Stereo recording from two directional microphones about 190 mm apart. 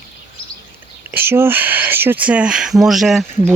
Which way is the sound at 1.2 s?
10° right (ahead or behind).